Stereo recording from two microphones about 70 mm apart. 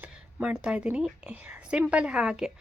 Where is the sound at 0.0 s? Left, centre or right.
Right.